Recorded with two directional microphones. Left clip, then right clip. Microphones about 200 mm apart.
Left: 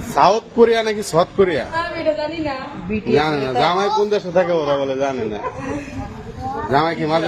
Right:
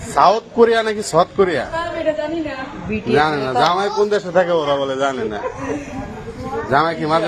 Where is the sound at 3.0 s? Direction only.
15° left (ahead or behind).